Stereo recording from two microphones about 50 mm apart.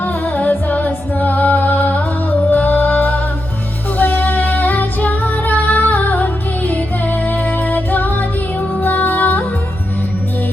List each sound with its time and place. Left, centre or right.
0.0 s music: left
3.9 s female singing: left
8.8 s music: left